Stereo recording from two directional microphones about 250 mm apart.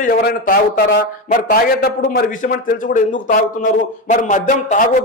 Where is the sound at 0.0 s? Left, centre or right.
Left.